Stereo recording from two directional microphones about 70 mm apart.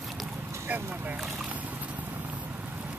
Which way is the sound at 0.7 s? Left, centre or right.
Right.